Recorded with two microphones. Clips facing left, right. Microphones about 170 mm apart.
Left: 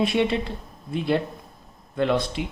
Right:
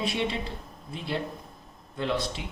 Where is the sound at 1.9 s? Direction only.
60° left (ahead or behind).